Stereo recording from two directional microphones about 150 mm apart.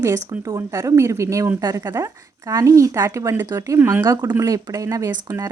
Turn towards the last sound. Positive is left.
turn(degrees=-25)  # may be behind; listen again after turning